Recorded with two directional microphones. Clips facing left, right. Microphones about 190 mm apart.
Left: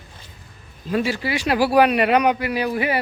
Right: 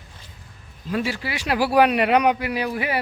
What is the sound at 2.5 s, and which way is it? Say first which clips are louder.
Speech: left 3 dB; 10° right (ahead or behind).